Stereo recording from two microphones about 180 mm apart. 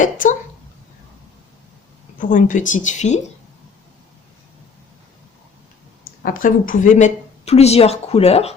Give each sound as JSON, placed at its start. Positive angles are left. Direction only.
{"t": 0.0, "sound": "speech", "side_deg": 45}
{"t": 2.1, "sound": "speech", "side_deg": 45}
{"t": 6.2, "sound": "a woman's voice", "side_deg": 50}